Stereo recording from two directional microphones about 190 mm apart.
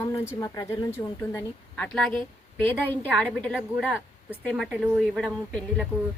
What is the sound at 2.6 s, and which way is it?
A woman's voice, 10° left (ahead or behind).